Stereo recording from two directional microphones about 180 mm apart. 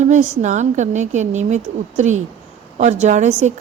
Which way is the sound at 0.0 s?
45° right (ahead or behind).